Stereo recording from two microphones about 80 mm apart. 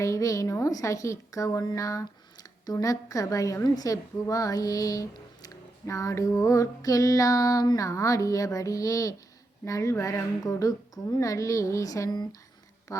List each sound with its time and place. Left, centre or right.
0.0 s a woman's voice: left
2.8 s carnatic music: left
7.9 s carnatic music: left
12.9 s carnatic music: left